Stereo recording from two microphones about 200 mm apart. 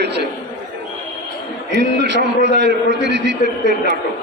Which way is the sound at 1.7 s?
60° right (ahead or behind).